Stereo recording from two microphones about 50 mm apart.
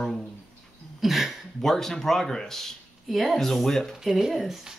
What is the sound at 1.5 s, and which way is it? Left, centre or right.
Speech, centre.